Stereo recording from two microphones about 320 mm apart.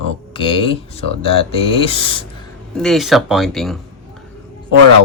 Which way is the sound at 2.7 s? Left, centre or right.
Centre.